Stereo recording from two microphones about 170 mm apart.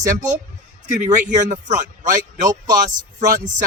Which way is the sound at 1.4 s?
45° right (ahead or behind).